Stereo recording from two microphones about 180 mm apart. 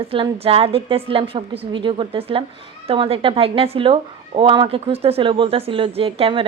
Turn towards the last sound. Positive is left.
turn(degrees=-30)  # may be behind; listen again after turning